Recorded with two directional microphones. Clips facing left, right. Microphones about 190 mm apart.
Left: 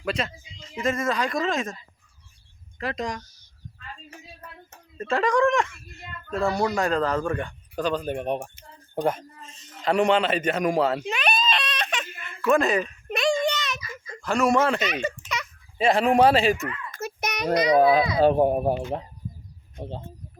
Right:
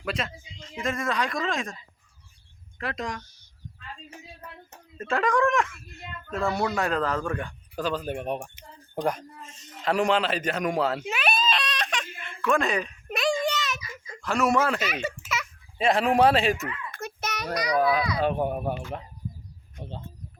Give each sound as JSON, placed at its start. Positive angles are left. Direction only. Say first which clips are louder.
{"t": 0.0, "sound": "a man's voice", "louder": "left 3 dB", "side_deg": 0}
{"t": 2.7, "sound": "speech", "louder": "left 3 dB", "side_deg": 0}
{"t": 4.9, "sound": "speech", "louder": "left 2 dB", "side_deg": 0}
{"t": 9.7, "sound": "a sound", "louder": "left 3 dB", "side_deg": 0}
{"t": 17.2, "sound": "a child's voice", "louder": "left 7 dB", "side_deg": 15}
{"t": 18.8, "sound": "a child's voice", "louder": "left 5 dB", "side_deg": 20}